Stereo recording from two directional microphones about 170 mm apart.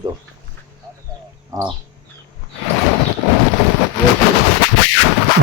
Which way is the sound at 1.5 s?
20° right (ahead or behind).